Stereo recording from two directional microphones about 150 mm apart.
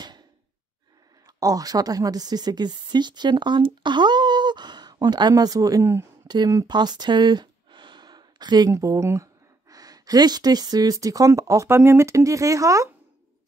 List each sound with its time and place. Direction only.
1.2 s a woman's voice: 25° right (ahead or behind)
6.2 s a sound: 30° right (ahead or behind)
8.7 s speech: 20° right (ahead or behind)